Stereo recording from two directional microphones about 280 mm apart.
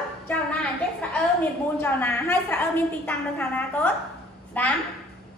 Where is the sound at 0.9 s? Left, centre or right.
Centre.